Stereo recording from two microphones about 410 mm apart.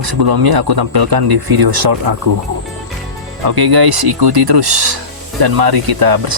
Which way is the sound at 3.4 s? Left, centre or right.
Right.